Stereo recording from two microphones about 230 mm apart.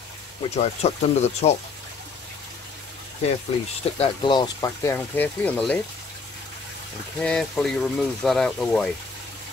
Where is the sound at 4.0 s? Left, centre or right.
Centre.